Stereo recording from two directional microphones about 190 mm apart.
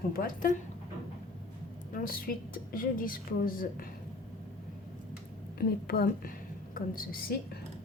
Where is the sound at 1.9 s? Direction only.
50° left (ahead or behind).